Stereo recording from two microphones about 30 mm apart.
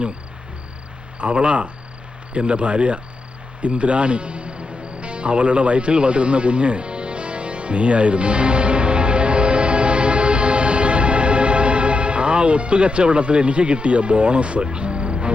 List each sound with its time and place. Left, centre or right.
1.2 s speech: right
3.6 s music: right